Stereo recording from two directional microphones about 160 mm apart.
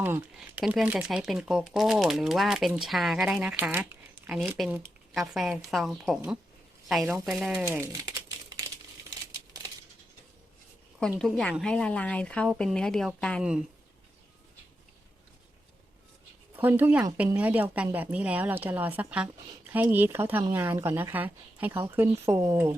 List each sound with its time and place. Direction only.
0.0 s speech: 10° right (ahead or behind)
4.6 s speech: centre (ahead or behind)
8.0 s typing: 25° right (ahead or behind)
11.0 s speech: 5° left (ahead or behind)
16.6 s speech: 10° right (ahead or behind)